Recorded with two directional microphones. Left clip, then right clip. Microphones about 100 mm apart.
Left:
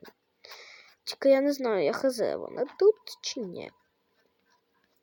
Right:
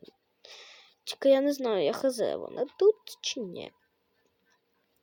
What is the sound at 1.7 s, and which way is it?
Speech, centre (ahead or behind).